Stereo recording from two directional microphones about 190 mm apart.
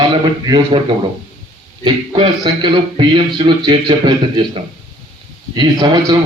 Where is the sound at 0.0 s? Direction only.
25° right (ahead or behind).